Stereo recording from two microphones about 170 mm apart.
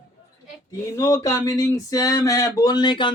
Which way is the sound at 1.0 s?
20° left (ahead or behind).